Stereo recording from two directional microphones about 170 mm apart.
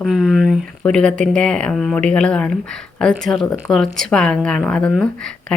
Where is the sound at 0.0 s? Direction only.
5° right (ahead or behind).